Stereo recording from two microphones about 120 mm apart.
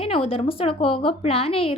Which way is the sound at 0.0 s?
55° left (ahead or behind).